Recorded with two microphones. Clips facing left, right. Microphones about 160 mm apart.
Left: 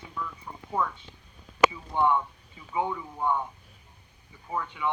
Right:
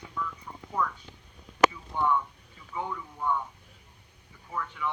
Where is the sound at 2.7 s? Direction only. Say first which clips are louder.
Left 5 dB; 20° left (ahead or behind).